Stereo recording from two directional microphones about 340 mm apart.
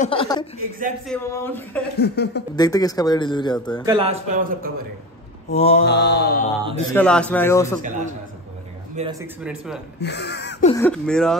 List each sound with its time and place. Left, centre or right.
0.0 s speech: centre
2.0 s mantra: left
2.5 s speech: centre
3.8 s speech: centre
5.5 s mantra: centre
5.9 s mantra: left
6.9 s speech: centre
7.8 s speech: right
9.4 s speech: centre
9.9 s speech: left
10.7 s speech: centre